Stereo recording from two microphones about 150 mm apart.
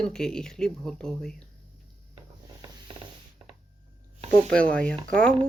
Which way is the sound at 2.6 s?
30° right (ahead or behind).